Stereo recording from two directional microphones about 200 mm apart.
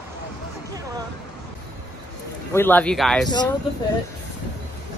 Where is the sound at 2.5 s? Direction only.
10° left (ahead or behind).